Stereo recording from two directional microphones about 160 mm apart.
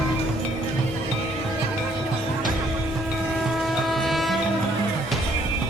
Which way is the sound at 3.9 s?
Centre (ahead or behind).